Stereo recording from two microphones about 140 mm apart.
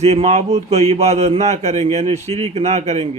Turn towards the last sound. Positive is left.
turn(degrees=-50)  # may be behind; listen again after turning